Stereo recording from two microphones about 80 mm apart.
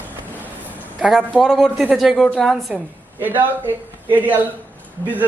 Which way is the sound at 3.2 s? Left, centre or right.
Right.